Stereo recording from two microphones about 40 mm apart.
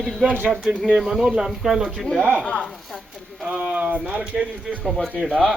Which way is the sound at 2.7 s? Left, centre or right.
Centre.